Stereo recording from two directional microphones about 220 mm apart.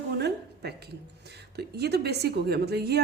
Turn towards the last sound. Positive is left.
turn(degrees=-45)  # may be behind; listen again after turning